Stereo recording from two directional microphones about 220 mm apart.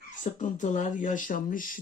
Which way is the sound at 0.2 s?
35° left (ahead or behind).